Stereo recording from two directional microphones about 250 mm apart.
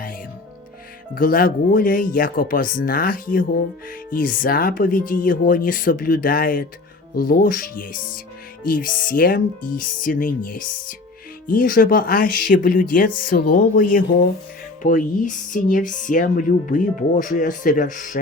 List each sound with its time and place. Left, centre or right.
1.1 s speech: left